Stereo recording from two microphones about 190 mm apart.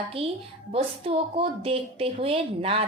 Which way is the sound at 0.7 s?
30° right (ahead or behind).